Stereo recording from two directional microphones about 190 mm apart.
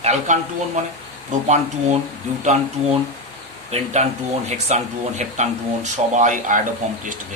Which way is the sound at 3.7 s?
35° right (ahead or behind).